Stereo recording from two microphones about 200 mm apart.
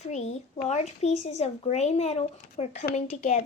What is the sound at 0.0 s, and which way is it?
Speech, 35° left (ahead or behind).